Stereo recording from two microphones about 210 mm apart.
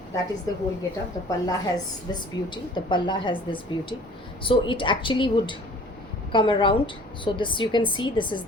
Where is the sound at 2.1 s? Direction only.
20° left (ahead or behind).